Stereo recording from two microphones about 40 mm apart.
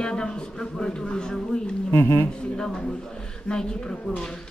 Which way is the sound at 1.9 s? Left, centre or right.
Left.